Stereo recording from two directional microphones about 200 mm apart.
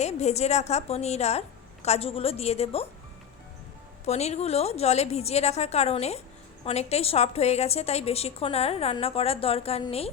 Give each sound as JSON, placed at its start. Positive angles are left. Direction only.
{"t": 0.0, "sound": "a woman's voice", "side_deg": 35}
{"t": 4.0, "sound": "a woman's voice", "side_deg": 35}